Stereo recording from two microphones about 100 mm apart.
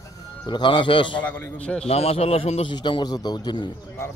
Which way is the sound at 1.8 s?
90° left.